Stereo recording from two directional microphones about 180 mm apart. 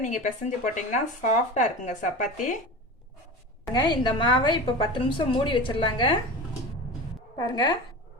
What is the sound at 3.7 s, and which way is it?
A woman's voice, 25° left (ahead or behind).